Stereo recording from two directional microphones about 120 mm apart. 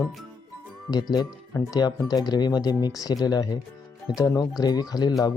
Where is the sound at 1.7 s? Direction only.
35° left (ahead or behind).